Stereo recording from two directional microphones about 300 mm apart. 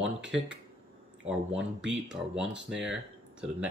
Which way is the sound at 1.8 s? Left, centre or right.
Right.